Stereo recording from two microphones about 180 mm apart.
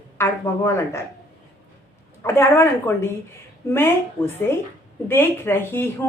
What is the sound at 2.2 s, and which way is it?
Speech, 15° left (ahead or behind).